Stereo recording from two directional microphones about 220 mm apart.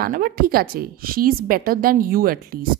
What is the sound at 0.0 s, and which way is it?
A woman's voice, 40° right (ahead or behind).